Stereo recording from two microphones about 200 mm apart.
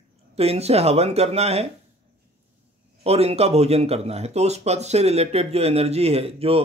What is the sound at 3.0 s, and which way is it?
Speech, 30° right (ahead or behind).